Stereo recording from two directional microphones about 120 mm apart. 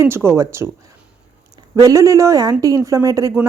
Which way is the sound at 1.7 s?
30° right (ahead or behind).